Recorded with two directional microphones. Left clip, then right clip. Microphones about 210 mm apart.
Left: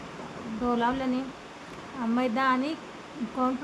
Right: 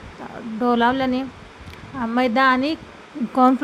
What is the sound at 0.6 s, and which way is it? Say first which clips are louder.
Speech: right 9 dB; 35° right (ahead or behind).